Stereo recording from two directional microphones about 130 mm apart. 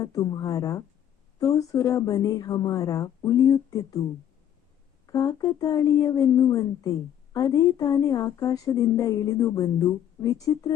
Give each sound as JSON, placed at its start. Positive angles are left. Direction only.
{"t": 0.0, "sound": "a woman's voice", "side_deg": 30}
{"t": 5.0, "sound": "a woman's voice", "side_deg": 30}